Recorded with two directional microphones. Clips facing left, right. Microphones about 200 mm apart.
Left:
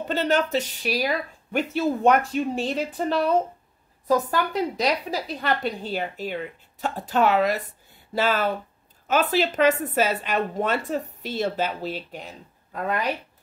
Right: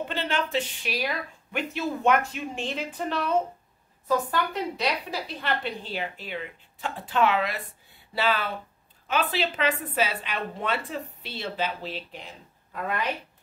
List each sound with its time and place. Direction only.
0.1 s a woman's voice: 40° left (ahead or behind)